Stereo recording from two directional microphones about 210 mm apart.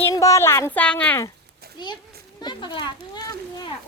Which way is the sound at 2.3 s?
20° left (ahead or behind).